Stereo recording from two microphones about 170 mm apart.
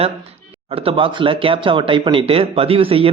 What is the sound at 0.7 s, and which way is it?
Speech, 35° right (ahead or behind).